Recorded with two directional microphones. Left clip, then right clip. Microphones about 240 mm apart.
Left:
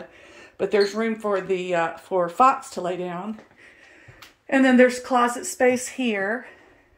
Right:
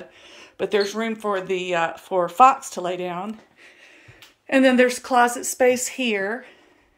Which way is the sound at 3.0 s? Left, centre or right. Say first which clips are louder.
Right 2 dB; centre.